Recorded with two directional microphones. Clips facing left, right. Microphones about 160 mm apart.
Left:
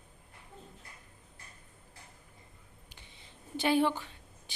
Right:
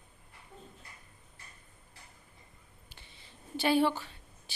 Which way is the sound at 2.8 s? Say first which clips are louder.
Even; 15° left (ahead or behind).